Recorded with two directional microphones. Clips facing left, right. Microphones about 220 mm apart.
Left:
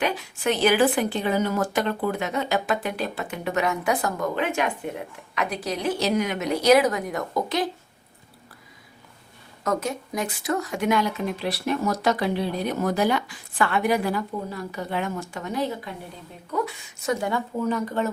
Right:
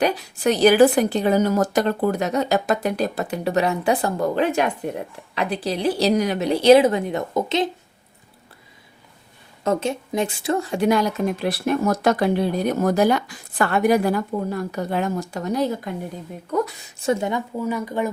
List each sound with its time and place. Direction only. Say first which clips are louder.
0.0 s speech: right 5 dB; 40° right (ahead or behind); by 7.7 s 25° right (ahead or behind)
9.6 s speech: right 4 dB; 25° right (ahead or behind)
17.6 s speech: even; 10° right (ahead or behind)